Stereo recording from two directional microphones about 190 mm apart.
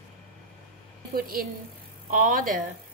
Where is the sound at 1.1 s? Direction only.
50° right (ahead or behind).